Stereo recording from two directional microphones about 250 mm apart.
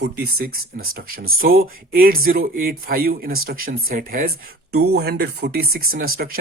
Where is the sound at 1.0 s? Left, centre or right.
Right.